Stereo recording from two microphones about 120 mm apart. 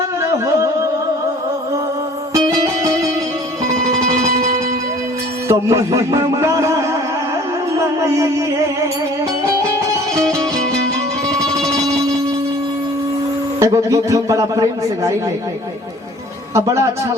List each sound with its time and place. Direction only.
0.2 s music: 25° right (ahead or behind)
5.5 s speech: 25° right (ahead or behind)
7.8 s music: 25° right (ahead or behind)
11.3 s music: 5° left (ahead or behind)
13.6 s a man's voice: 25° right (ahead or behind)
16.6 s a man's voice: 25° right (ahead or behind)